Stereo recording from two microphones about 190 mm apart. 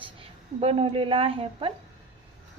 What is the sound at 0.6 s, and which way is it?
A woman's voice, 30° right (ahead or behind).